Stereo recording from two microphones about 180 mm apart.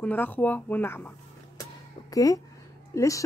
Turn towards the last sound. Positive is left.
turn(degrees=15)  # may be behind; listen again after turning